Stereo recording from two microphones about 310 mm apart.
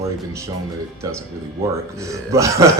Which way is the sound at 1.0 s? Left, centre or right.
Centre.